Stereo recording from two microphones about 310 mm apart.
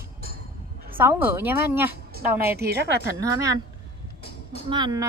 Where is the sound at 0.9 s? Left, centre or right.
Centre.